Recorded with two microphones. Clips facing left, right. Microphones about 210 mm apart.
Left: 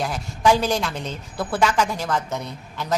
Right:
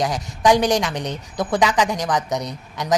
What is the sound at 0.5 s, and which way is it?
A woman's voice, 15° right (ahead or behind).